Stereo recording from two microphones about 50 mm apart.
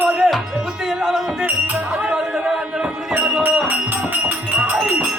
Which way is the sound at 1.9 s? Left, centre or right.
Right.